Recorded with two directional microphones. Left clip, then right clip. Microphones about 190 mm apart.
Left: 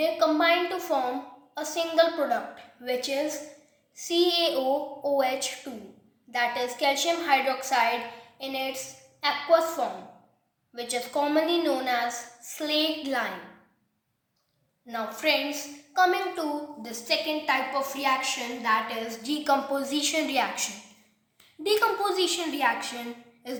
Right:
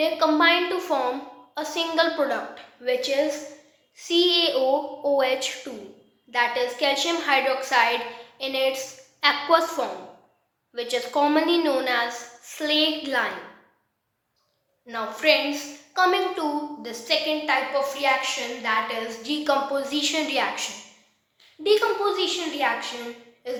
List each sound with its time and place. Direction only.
0.0 s a woman's voice: 20° left (ahead or behind)
14.8 s a woman's voice: 20° left (ahead or behind)